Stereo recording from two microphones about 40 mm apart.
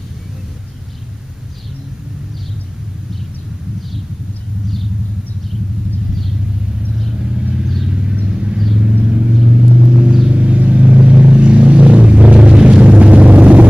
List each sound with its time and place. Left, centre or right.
7.8 s vehicle: centre
8.5 s vehicle: centre
9.0 s vehicle: centre
12.8 s a sound: right